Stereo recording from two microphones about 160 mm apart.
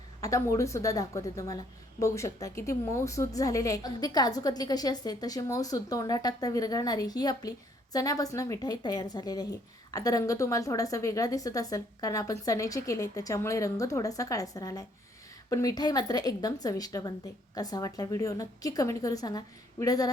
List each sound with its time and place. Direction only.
0.2 s speech: 20° left (ahead or behind)